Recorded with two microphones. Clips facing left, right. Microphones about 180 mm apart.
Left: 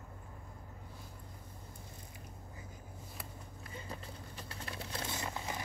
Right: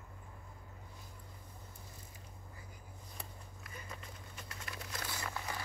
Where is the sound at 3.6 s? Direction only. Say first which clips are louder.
Left 4 dB; 30° left (ahead or behind).